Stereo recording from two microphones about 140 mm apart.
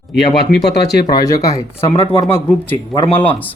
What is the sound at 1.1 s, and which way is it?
Speech, 25° left (ahead or behind).